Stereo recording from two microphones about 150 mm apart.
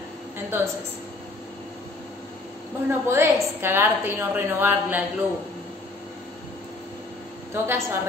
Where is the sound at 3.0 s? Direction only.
15° right (ahead or behind).